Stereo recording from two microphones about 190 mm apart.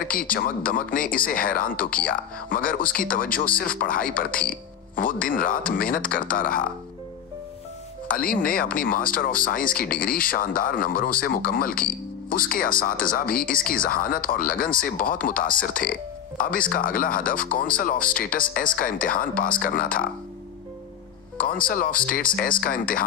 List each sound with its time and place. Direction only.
0.0 s speech: 50° left (ahead or behind)
8.1 s speech: 50° left (ahead or behind)
21.4 s speech: 45° left (ahead or behind)